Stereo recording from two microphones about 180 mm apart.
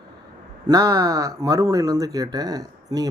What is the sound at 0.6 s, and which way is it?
Speech, 20° right (ahead or behind).